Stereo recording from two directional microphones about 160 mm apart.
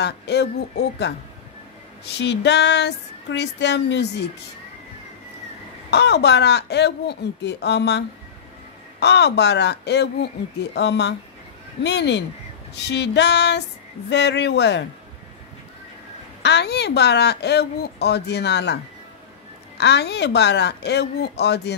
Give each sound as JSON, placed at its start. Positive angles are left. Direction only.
{"t": 0.0, "sound": "speech", "side_deg": 90}
{"t": 5.9, "sound": "speech", "side_deg": 90}
{"t": 9.0, "sound": "speech", "side_deg": 90}
{"t": 16.4, "sound": "speech", "side_deg": 90}
{"t": 19.8, "sound": "speech", "side_deg": 90}